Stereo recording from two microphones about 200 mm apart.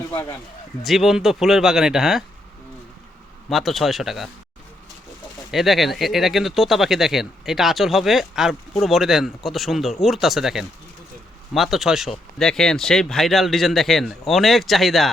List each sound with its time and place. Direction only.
0.1 s speech: 10° left (ahead or behind)
0.9 s speech: centre (ahead or behind)
3.5 s speech: centre (ahead or behind)
5.5 s speech: centre (ahead or behind)